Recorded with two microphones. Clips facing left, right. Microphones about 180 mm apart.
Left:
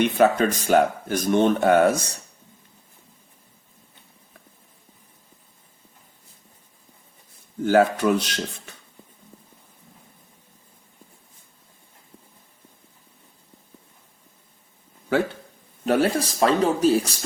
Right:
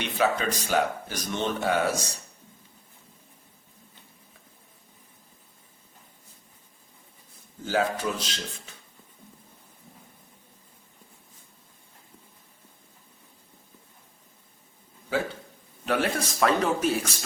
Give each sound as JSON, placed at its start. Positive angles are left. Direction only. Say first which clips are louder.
{"t": 0.0, "sound": "speech", "louder": "left 7 dB", "side_deg": 50}
{"t": 7.6, "sound": "speech", "louder": "left 8 dB", "side_deg": 60}
{"t": 15.9, "sound": "speech", "louder": "left 6 dB", "side_deg": 35}